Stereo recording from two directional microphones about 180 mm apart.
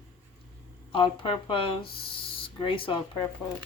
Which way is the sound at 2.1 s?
30° left (ahead or behind).